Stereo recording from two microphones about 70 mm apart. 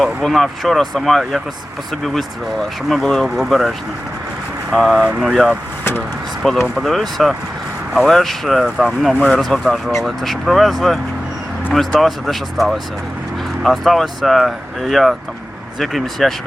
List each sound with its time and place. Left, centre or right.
0.0 s speech: centre